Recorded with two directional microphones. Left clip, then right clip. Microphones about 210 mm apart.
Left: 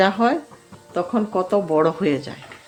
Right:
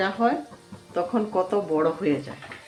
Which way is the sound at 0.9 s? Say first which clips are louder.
Left 3 dB; 35° left (ahead or behind).